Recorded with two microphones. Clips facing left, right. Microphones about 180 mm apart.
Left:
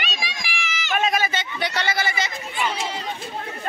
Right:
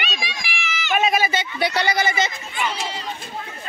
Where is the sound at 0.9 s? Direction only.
10° right (ahead or behind).